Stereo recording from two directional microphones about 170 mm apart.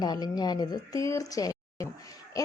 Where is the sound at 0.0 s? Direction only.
25° left (ahead or behind).